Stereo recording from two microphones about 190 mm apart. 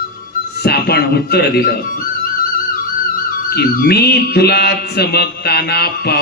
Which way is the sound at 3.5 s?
55° left (ahead or behind).